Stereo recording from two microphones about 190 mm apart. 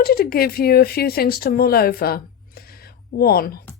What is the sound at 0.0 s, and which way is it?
A woman's voice, 55° left (ahead or behind).